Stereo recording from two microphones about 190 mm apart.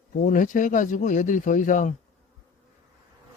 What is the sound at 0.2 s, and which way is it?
Speech, 45° left (ahead or behind).